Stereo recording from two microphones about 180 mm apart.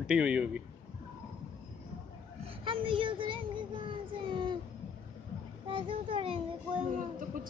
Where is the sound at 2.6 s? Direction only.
30° right (ahead or behind).